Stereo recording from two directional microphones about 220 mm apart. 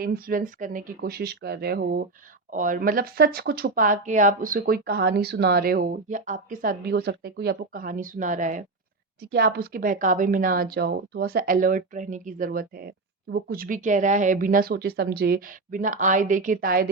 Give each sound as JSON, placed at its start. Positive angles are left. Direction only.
{"t": 0.0, "sound": "speech", "side_deg": -40}